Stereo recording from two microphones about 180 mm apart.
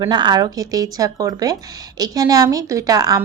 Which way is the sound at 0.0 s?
25° right (ahead or behind).